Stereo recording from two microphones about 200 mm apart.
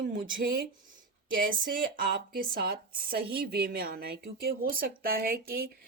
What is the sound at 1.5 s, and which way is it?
Speech, 45° right (ahead or behind).